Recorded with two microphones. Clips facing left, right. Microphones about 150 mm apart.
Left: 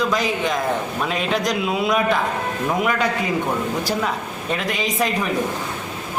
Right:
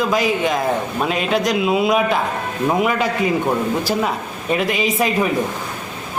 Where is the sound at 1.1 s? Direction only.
5° right (ahead or behind).